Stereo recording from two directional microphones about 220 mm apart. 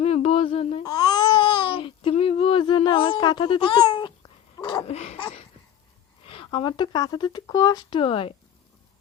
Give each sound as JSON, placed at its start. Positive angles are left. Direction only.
{"t": 0.0, "sound": "babbling", "side_deg": 30}
{"t": 4.5, "sound": "a sound", "side_deg": 20}
{"t": 6.2, "sound": "speech", "side_deg": 25}